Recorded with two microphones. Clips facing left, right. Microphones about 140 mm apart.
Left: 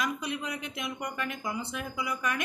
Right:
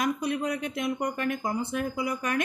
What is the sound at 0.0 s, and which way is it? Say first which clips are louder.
Speech: right 5 dB; 55° right (ahead or behind).